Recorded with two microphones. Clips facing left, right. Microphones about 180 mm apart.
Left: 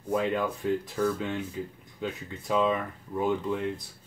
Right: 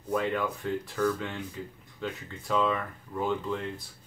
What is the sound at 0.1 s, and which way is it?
Speech, 20° left (ahead or behind).